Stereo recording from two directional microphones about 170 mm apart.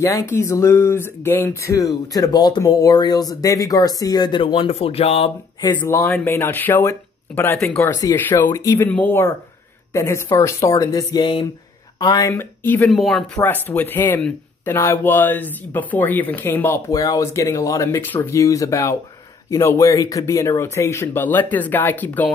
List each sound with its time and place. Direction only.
0.0 s speech: 15° left (ahead or behind); by 5.3 s 35° left (ahead or behind)
5.8 s speech: 15° left (ahead or behind)